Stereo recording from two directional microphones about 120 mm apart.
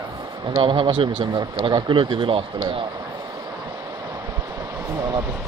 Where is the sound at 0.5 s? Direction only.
40° right (ahead or behind).